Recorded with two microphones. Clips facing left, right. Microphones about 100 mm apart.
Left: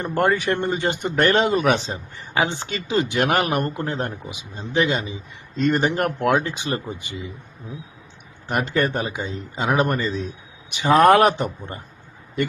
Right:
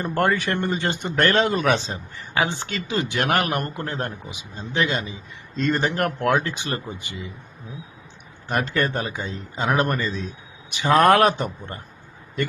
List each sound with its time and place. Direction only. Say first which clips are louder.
0.1 s speech: left 2 dB; 20° left (ahead or behind)
8.4 s a man's voice: left 1 dB; 20° left (ahead or behind)